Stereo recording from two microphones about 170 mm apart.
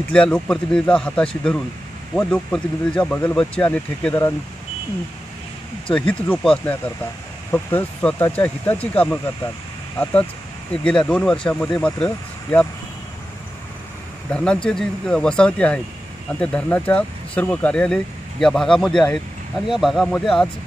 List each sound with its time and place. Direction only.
0.1 s speech: 5° left (ahead or behind)
5.9 s speech: 5° left (ahead or behind)
10.8 s speech: 5° left (ahead or behind)
14.3 s speech: 5° left (ahead or behind)